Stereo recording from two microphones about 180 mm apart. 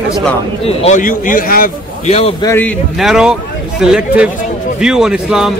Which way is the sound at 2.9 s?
Centre (ahead or behind).